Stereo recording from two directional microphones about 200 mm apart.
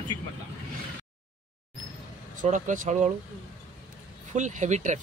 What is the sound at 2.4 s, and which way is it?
Speech, 40° right (ahead or behind).